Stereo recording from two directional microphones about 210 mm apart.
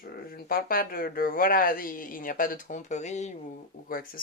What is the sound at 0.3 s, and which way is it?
Speech, 45° left (ahead or behind).